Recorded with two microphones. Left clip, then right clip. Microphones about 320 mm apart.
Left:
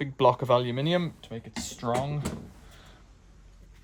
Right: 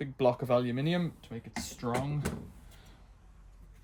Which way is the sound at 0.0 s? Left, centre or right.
Centre.